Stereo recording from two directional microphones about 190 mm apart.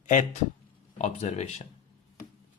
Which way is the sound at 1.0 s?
35° left (ahead or behind).